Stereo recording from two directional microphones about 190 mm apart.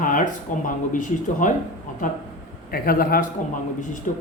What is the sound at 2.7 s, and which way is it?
Speech, 50° left (ahead or behind).